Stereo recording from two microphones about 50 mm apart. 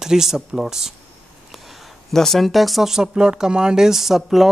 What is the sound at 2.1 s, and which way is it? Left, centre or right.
Speech, centre.